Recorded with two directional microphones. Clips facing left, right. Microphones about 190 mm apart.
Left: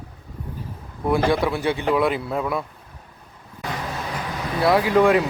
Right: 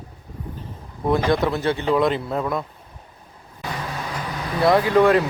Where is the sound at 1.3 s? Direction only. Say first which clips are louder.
Right 1 dB; 10° left (ahead or behind).